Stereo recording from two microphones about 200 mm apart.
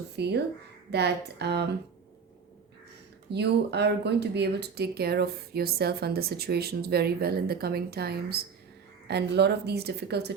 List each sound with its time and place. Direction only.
0.2 s a woman's voice: 55° right (ahead or behind)
3.3 s a woman's voice: 55° right (ahead or behind)